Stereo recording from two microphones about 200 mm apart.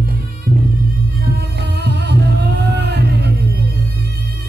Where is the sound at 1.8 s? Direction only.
55° right (ahead or behind).